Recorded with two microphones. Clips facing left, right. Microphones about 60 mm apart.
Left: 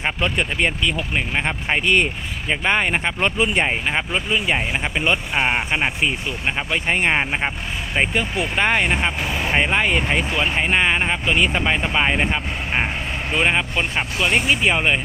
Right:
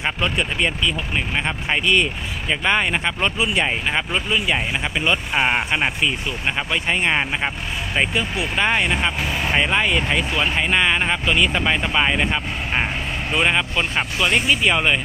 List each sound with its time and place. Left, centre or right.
0.3 s speech: left
1.3 s speech: left
3.3 s speech: left
3.6 s speech: centre
5.3 s speech: centre
6.7 s speech: left
7.1 s speech: centre
8.1 s speech: left
8.6 s speech: left
11.3 s speech: left